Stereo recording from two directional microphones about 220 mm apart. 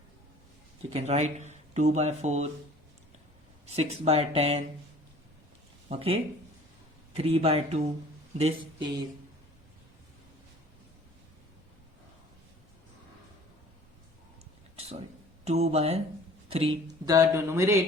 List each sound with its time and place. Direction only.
0.9 s speech: 30° right (ahead or behind)
3.7 s speech: 30° right (ahead or behind)
5.9 s speech: 25° right (ahead or behind)
14.8 s a sound: 30° right (ahead or behind)
15.4 s speech: 30° right (ahead or behind); by 17.7 s 10° right (ahead or behind)